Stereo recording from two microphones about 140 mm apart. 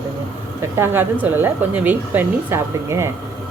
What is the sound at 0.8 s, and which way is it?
A woman's voice, 15° right (ahead or behind).